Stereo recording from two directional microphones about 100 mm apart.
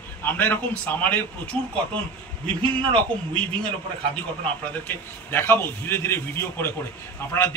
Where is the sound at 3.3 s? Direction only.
10° left (ahead or behind).